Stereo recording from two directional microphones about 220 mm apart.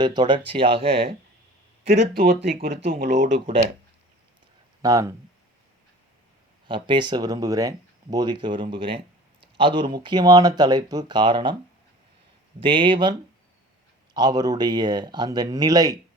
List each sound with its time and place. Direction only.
0.0 s speech: 20° right (ahead or behind)
1.9 s speech: 45° right (ahead or behind)
4.8 s speech: 15° right (ahead or behind)
6.7 s speech: 20° right (ahead or behind)
12.5 s speech: 25° right (ahead or behind)